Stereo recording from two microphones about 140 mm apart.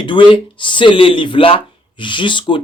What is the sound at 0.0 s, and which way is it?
Speech, 35° left (ahead or behind).